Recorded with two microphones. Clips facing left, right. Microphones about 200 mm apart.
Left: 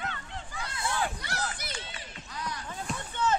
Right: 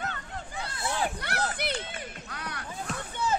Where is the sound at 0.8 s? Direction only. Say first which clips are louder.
Right 1 dB; 20° right (ahead or behind).